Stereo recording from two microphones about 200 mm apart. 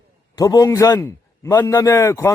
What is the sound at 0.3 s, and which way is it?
A man's voice, 15° left (ahead or behind).